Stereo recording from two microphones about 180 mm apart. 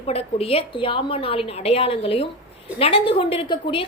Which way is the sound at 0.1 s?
35° left (ahead or behind).